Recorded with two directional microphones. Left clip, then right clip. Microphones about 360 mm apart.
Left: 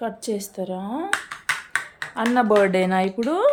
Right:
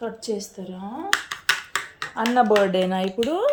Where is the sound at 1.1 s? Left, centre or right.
Centre.